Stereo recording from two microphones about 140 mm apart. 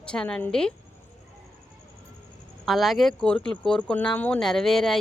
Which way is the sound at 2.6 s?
Centre (ahead or behind).